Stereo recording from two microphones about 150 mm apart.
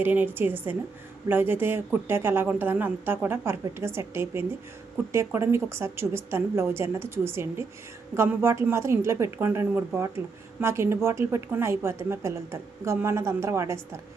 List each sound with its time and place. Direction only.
0.0 s a woman's voice: 10° right (ahead or behind)